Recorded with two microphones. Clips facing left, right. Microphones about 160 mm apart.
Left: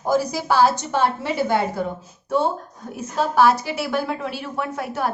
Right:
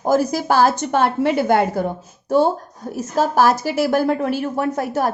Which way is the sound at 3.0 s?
40° right (ahead or behind).